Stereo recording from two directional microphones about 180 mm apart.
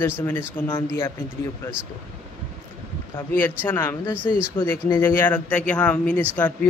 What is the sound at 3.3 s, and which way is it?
Speech, 15° left (ahead or behind).